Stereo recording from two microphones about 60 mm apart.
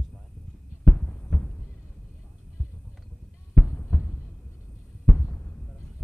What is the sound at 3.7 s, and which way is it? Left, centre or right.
Heart sounds, left.